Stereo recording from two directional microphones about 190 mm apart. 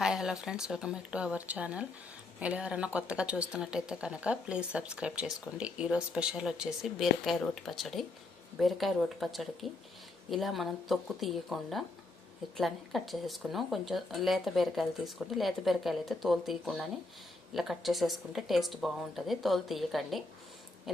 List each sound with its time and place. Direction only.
0.0 s speech: 5° right (ahead or behind)